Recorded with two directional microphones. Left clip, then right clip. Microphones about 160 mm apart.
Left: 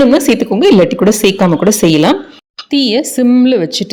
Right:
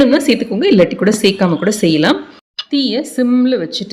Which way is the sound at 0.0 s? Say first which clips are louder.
Left 3 dB; 30° left (ahead or behind).